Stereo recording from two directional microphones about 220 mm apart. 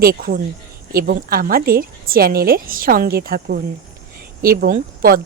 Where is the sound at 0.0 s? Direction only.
40° right (ahead or behind).